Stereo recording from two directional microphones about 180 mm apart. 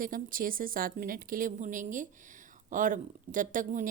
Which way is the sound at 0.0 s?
50° right (ahead or behind).